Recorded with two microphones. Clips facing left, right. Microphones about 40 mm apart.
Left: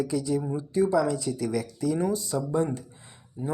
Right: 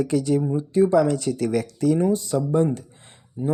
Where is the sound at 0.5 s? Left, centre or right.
Right.